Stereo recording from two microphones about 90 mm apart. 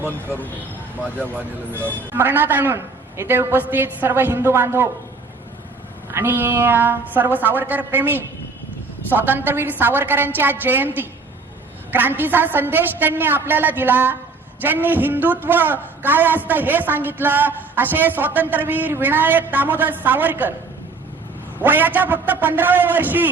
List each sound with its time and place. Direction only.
2.1 s a man's voice: 25° right (ahead or behind)
6.1 s a man's voice: 25° right (ahead or behind)
21.6 s a man's voice: 20° right (ahead or behind)